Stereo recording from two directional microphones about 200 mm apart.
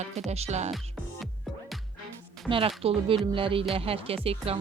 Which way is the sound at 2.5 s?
30° right (ahead or behind).